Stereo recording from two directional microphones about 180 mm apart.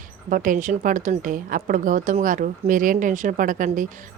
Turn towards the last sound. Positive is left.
turn(degrees=-45)  # may be behind; listen again after turning